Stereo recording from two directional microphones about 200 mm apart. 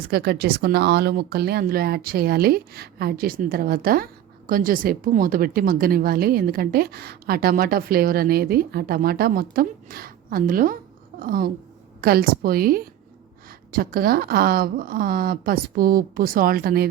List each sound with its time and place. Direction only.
0.1 s speech: 50° right (ahead or behind)